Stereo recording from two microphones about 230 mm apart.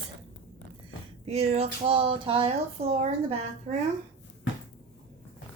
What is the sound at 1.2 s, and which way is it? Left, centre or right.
Speech, right.